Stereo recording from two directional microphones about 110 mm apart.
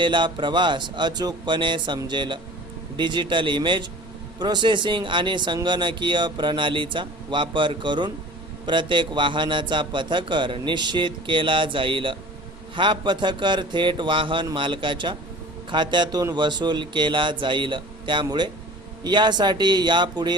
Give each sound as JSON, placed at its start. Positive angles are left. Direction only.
{"t": 0.0, "sound": "a man's voice", "side_deg": -45}